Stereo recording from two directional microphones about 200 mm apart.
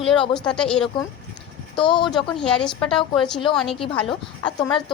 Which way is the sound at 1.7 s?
25° left (ahead or behind).